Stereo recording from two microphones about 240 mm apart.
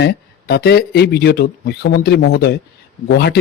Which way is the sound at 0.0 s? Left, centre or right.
Left.